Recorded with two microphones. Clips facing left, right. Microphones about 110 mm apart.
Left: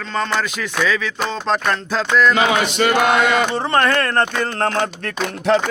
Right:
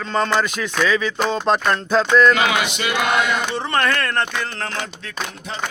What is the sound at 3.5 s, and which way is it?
Speech, 30° left (ahead or behind).